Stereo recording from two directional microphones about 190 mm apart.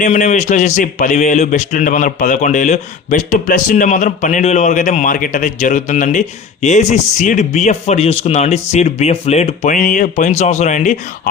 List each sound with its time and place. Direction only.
0.0 s a man's voice: 40° left (ahead or behind)